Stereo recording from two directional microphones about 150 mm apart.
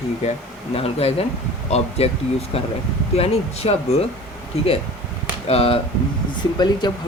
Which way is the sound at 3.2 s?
40° left (ahead or behind).